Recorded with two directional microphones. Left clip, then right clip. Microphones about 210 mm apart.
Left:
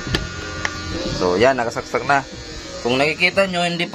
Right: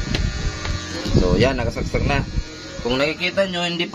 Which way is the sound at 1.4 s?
5° right (ahead or behind).